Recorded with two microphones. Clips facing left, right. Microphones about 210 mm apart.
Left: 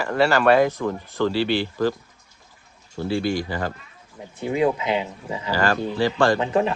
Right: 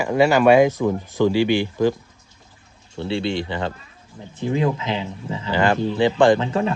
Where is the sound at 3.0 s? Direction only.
25° right (ahead or behind).